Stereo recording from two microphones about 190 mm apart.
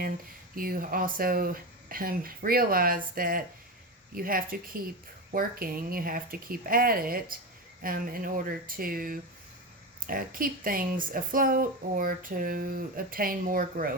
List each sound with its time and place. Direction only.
0.5 s speech: 50° right (ahead or behind)